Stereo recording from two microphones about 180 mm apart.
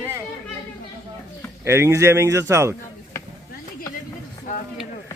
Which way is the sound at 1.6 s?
15° right (ahead or behind).